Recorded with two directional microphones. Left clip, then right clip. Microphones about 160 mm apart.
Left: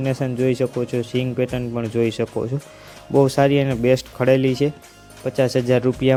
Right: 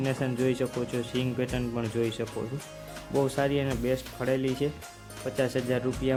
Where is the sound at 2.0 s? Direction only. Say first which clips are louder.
Left 11 dB; 40° left (ahead or behind).